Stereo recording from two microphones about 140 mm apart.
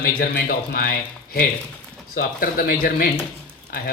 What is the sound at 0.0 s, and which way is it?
Speech, 90° left.